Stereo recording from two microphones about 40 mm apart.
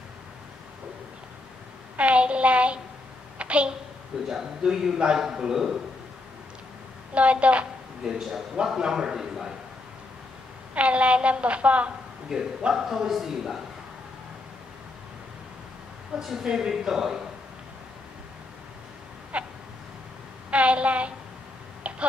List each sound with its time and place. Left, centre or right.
2.0 s a woman's voice: right
3.3 s a sound: right
4.3 s a man's voice: centre
7.2 s a woman's voice: right
8.0 s a man's voice: centre
10.7 s a woman's voice: right
12.3 s a man's voice: centre
16.2 s a man's voice: centre
19.3 s a sound: right
20.5 s a woman's voice: right
21.8 s a sound: right